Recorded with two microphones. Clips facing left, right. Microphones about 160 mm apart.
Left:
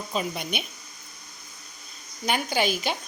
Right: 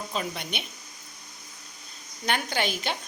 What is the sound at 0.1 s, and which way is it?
Speech, 10° left (ahead or behind).